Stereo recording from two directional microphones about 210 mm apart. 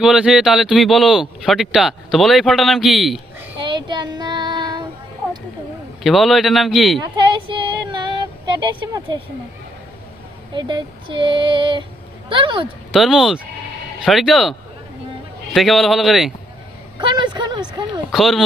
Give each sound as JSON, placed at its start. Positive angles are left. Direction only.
{"t": 0.0, "sound": "speech", "side_deg": 0}
{"t": 3.6, "sound": "child singing", "side_deg": -20}
{"t": 6.0, "sound": "speech", "side_deg": 0}
{"t": 7.0, "sound": "female singing", "side_deg": -20}
{"t": 10.5, "sound": "female singing", "side_deg": -20}
{"t": 12.9, "sound": "speech", "side_deg": 0}
{"t": 15.5, "sound": "speech", "side_deg": 0}
{"t": 17.0, "sound": "speech", "side_deg": -20}
{"t": 18.1, "sound": "speech", "side_deg": 0}